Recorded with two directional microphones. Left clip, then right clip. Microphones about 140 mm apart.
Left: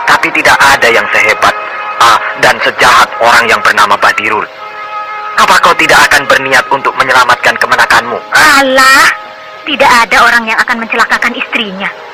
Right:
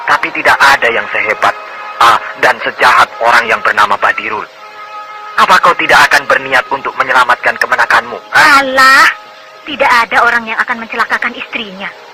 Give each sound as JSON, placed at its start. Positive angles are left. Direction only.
{"t": 0.0, "sound": "speech", "side_deg": 35}